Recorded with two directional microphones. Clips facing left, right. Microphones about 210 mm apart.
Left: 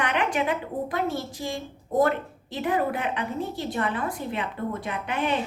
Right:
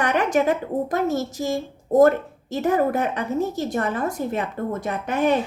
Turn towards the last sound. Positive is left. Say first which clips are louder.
# right 6 dB
turn(degrees=-45)  # may be behind; listen again after turning